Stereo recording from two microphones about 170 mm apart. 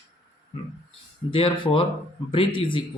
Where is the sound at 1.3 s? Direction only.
30° left (ahead or behind).